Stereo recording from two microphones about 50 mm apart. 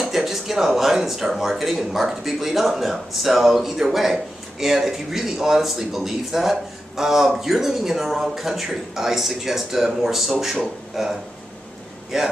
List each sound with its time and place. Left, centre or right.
0.0 s speech: centre
12.1 s speech: centre